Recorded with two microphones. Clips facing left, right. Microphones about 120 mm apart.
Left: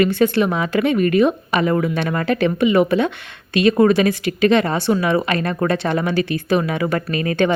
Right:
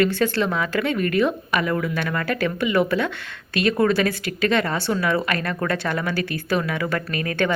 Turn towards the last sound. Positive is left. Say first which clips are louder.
# left 5 dB
turn(degrees=20)  # may be behind; listen again after turning